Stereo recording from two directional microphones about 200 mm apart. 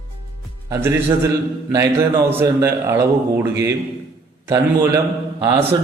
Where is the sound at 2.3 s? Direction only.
10° right (ahead or behind).